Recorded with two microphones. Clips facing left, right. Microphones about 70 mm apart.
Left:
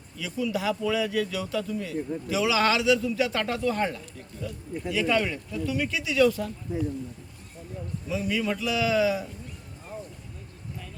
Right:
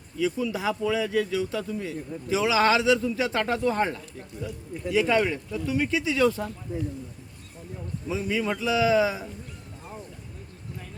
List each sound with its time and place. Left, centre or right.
0.2 s speech: right
8.1 s speech: right